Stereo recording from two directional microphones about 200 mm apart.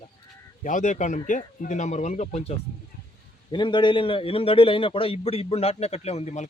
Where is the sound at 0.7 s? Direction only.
40° left (ahead or behind).